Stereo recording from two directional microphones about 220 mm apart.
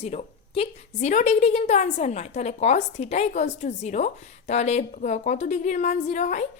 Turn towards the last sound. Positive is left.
turn(degrees=30)  # may be behind; listen again after turning